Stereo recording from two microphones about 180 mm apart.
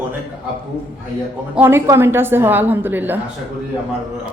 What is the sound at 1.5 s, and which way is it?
A woman's voice, 10° right (ahead or behind).